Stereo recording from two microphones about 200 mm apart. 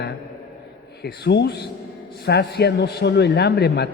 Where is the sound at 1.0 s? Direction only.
55° left (ahead or behind).